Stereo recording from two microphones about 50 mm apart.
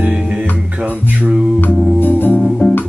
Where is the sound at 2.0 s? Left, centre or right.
Left.